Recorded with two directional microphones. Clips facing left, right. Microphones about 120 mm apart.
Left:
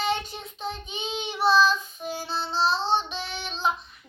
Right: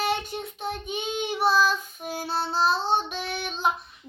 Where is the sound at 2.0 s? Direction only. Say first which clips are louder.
Right 2 dB; 55° right (ahead or behind).